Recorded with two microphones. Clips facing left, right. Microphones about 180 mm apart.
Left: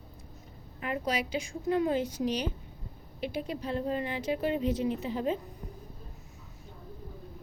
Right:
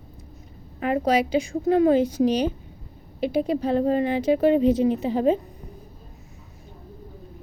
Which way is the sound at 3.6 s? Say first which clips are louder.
Right 9 dB; 90° right.